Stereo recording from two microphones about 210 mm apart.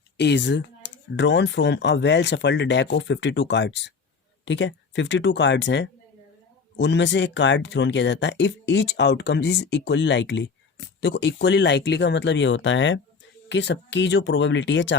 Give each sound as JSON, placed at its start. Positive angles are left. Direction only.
{"t": 0.2, "sound": "speech", "side_deg": 55}